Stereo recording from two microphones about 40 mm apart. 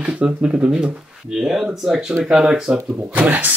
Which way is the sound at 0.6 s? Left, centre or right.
Right.